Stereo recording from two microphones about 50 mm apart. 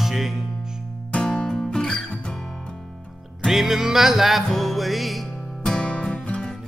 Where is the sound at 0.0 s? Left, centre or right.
Centre.